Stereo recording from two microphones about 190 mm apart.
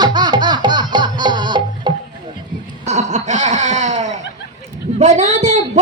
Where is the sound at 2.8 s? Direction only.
35° right (ahead or behind).